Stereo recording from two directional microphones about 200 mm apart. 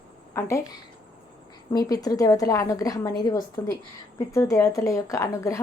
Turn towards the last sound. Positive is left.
turn(degrees=15)  # may be behind; listen again after turning